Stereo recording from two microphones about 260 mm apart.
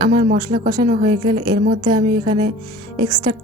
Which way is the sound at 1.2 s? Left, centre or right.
Centre.